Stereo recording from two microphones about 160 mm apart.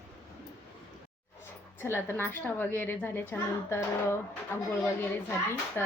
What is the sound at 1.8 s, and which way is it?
A woman's voice, 15° left (ahead or behind).